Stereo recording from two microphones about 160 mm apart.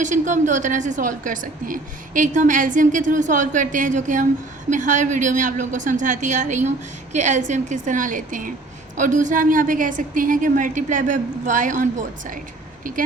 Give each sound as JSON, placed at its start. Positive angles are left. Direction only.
{"t": 0.0, "sound": "a woman's voice", "side_deg": -50}